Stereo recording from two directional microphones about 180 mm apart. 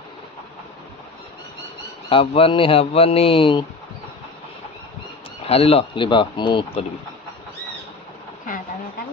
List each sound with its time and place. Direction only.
2.0 s speech: 30° left (ahead or behind)
5.4 s speech: 35° left (ahead or behind)